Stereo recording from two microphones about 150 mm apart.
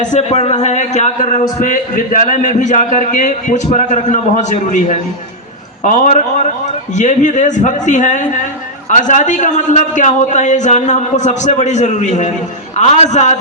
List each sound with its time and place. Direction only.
0.0 s a man's voice: 50° left (ahead or behind)